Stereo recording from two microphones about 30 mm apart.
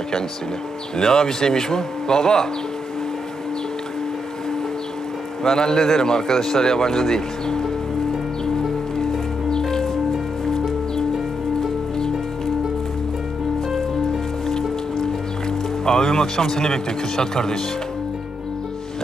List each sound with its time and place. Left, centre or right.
0.9 s speech: centre
5.4 s speech: centre
9.5 s music: centre
15.0 s speech: centre